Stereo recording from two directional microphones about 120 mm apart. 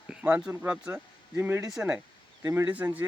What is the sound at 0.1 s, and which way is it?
Speech, 10° right (ahead or behind).